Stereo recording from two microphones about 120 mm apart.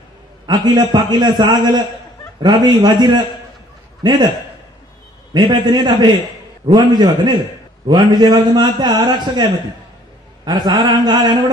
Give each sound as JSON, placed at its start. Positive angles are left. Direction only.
{"t": 0.5, "sound": "a man's voice", "side_deg": -35}
{"t": 5.3, "sound": "a man's voice", "side_deg": -35}